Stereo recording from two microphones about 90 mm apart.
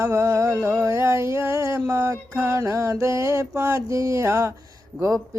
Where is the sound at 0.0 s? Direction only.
30° right (ahead or behind).